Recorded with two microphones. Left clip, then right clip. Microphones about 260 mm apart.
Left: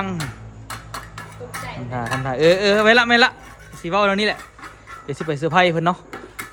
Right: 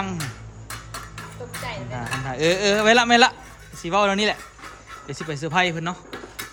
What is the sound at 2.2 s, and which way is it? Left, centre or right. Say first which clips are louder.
Speech: left 5 dB; centre.